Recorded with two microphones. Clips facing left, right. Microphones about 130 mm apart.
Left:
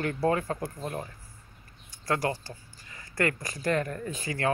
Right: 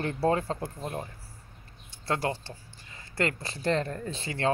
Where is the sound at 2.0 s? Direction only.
25° right (ahead or behind).